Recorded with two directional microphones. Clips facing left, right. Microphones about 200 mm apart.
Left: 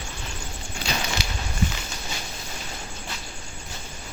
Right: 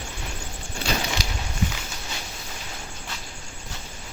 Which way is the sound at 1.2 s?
40° right (ahead or behind).